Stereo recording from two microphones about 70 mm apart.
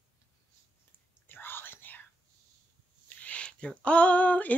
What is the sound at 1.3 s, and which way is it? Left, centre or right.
Whispering, left.